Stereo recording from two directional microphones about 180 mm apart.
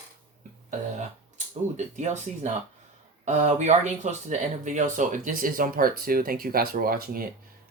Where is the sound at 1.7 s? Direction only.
40° right (ahead or behind).